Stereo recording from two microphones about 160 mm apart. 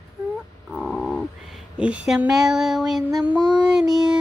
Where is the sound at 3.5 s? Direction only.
5° right (ahead or behind).